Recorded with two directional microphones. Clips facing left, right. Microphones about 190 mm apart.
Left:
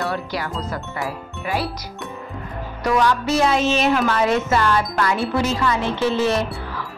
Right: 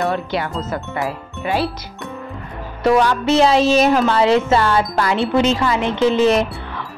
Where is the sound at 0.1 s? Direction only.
25° right (ahead or behind).